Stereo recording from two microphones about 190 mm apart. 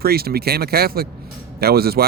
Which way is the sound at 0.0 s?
55° right (ahead or behind).